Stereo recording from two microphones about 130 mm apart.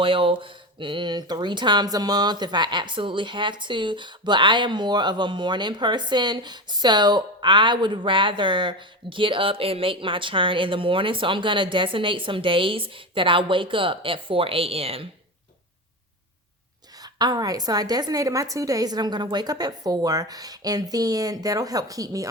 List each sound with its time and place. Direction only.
0.0 s speech: 40° right (ahead or behind)
17.0 s a woman's voice: 30° right (ahead or behind)